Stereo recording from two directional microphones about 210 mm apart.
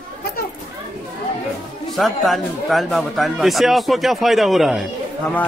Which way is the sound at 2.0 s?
Centre (ahead or behind).